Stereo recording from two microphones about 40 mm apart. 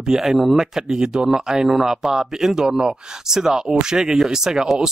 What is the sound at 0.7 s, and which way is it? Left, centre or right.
Speech, centre.